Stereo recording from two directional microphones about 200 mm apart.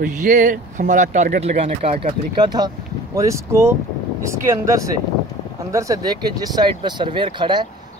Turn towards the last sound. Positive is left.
turn(degrees=-25)  # may be behind; listen again after turning